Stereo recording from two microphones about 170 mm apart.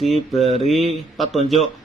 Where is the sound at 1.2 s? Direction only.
Centre (ahead or behind).